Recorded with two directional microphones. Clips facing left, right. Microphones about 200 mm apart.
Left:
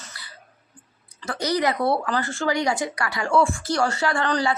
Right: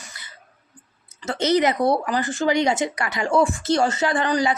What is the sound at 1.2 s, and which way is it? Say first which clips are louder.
A woman's voice: right 4 dB; 20° right (ahead or behind).